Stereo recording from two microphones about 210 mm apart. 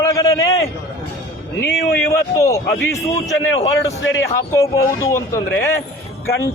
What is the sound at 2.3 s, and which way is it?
Speech, 15° left (ahead or behind).